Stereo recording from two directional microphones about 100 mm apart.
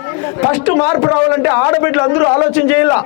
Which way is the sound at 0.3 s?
20° left (ahead or behind).